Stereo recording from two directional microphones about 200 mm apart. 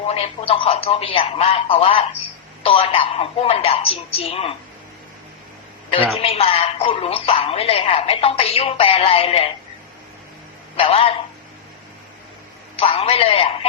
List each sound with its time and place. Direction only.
0.1 s a woman's voice: 30° left (ahead or behind)
6.1 s a woman's voice: 30° left (ahead or behind)
10.8 s a woman's voice: 30° left (ahead or behind)
12.7 s a woman's voice: 30° left (ahead or behind)